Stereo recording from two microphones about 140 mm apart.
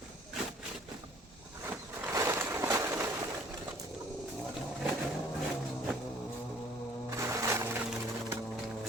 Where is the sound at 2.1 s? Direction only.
20° right (ahead or behind).